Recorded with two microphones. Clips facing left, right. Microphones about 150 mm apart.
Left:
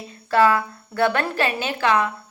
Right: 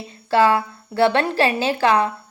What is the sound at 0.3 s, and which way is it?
A woman's voice, 25° right (ahead or behind).